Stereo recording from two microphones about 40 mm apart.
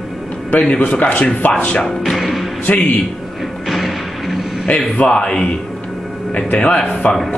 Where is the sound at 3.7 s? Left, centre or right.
Centre.